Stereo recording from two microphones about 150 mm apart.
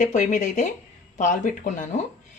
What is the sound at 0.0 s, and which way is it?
A woman's voice, 55° left (ahead or behind).